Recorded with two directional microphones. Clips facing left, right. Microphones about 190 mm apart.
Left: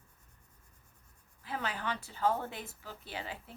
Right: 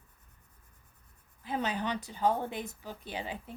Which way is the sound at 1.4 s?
20° right (ahead or behind).